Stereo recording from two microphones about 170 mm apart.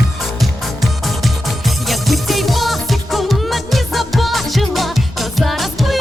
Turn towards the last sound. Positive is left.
turn(degrees=0)  # may be behind; listen again after turning